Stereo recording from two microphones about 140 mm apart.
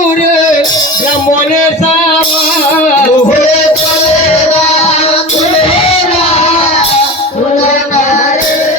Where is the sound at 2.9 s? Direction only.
60° left (ahead or behind).